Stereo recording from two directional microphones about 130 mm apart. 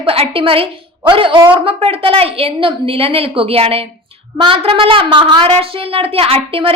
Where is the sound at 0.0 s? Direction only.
45° right (ahead or behind).